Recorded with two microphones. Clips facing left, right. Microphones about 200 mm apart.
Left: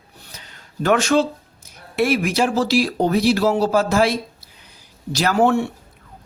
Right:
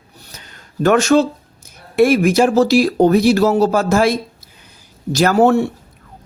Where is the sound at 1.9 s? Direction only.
45° right (ahead or behind).